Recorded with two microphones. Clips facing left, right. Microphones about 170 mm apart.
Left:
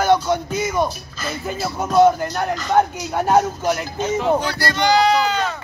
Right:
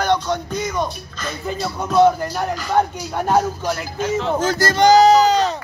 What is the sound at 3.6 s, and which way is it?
Speech, 20° left (ahead or behind).